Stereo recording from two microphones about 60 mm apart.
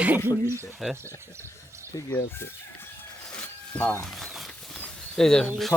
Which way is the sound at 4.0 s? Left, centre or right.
Centre.